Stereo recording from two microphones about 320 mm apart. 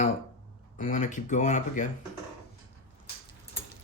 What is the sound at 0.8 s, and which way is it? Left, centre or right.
Speech, left.